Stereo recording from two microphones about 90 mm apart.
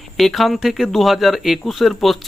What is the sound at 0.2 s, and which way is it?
Speech, centre (ahead or behind).